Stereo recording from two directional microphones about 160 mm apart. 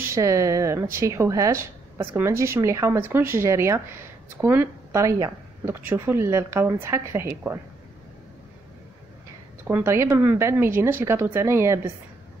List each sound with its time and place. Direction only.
0.0 s speech: 20° right (ahead or behind)
9.7 s speech: 15° right (ahead or behind)